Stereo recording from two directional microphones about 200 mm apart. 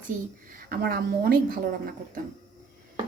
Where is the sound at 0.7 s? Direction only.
50° right (ahead or behind).